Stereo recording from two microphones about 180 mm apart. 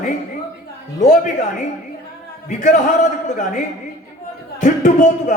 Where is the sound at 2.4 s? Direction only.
45° left (ahead or behind).